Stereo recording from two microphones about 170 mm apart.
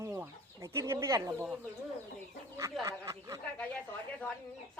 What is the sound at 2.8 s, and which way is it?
Speech, 20° right (ahead or behind).